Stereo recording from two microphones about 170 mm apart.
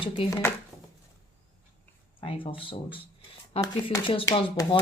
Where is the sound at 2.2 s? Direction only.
30° left (ahead or behind).